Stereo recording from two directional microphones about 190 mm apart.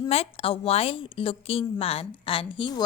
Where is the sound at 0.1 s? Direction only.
30° left (ahead or behind).